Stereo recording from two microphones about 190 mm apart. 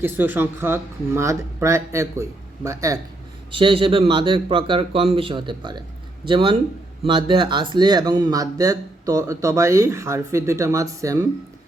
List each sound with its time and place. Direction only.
0.0 s speech: 10° right (ahead or behind)
3.5 s a man's voice: 25° right (ahead or behind)